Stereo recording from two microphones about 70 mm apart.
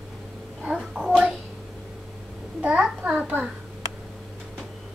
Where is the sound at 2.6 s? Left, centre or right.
Centre.